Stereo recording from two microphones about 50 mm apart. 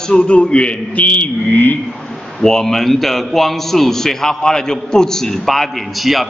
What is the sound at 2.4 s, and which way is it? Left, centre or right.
A man's voice, centre.